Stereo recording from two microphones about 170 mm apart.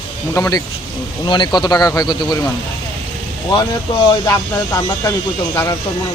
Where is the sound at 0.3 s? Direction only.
15° left (ahead or behind).